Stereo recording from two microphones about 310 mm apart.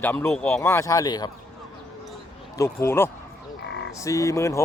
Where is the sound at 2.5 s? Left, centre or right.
Centre.